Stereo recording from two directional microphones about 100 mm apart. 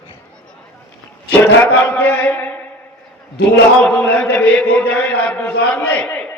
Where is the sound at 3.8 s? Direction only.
10° left (ahead or behind).